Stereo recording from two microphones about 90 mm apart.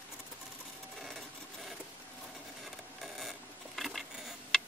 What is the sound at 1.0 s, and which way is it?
Sewing machine, centre (ahead or behind).